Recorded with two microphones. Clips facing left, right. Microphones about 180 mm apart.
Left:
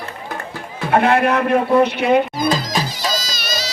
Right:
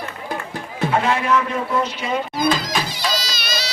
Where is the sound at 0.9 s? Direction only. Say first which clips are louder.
Left 5 dB; 60° left (ahead or behind).